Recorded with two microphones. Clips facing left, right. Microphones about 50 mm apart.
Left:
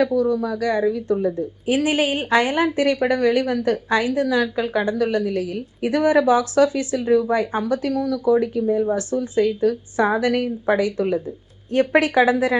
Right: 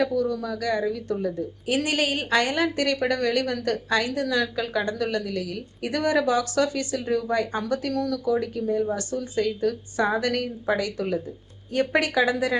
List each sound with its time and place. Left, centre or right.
0.0 s speech: left
0.6 s a woman's voice: centre
12.2 s a woman's voice: centre